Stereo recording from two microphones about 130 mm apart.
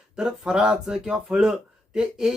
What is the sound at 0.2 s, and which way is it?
Speech, 5° right (ahead or behind).